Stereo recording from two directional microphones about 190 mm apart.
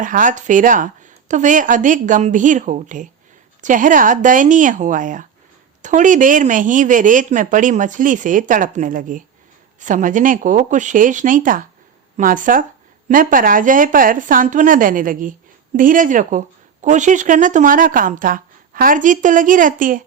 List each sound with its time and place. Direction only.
0.0 s a woman's voice: 45° right (ahead or behind)